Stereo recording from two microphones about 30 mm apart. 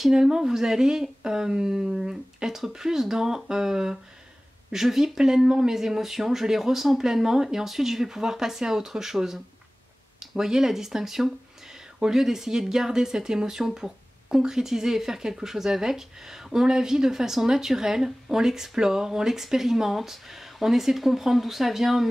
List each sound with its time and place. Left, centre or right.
0.1 s speech: centre